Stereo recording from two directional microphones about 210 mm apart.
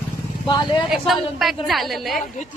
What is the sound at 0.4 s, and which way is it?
Speech, 20° left (ahead or behind).